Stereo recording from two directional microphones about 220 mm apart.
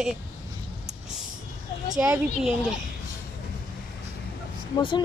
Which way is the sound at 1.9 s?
5° right (ahead or behind).